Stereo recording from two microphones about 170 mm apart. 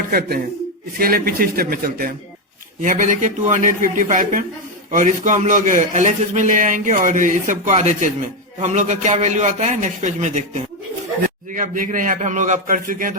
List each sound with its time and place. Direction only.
0.1 s a man's voice: 60° right (ahead or behind)